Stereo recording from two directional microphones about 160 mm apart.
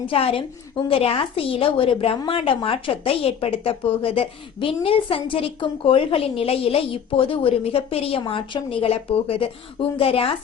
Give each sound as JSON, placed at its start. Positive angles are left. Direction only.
{"t": 0.1, "sound": "a woman's voice", "side_deg": 35}